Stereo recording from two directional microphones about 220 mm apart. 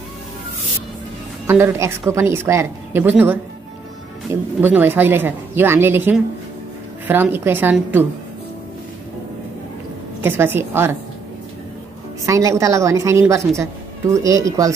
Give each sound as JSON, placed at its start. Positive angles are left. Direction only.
{"t": 1.5, "sound": "a woman's voice", "side_deg": -10}
{"t": 4.6, "sound": "a woman's voice", "side_deg": -10}
{"t": 10.2, "sound": "a woman's voice", "side_deg": -10}
{"t": 12.3, "sound": "a woman's voice", "side_deg": -15}